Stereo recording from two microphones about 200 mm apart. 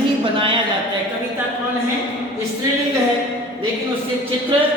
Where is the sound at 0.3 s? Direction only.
25° right (ahead or behind).